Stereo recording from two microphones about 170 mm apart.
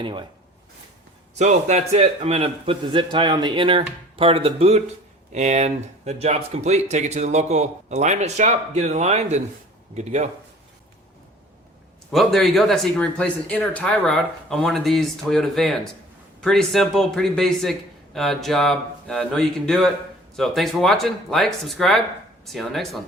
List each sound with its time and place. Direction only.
0.0 s speech: 30° right (ahead or behind)
1.4 s speech: 45° right (ahead or behind)
12.1 s speech: centre (ahead or behind)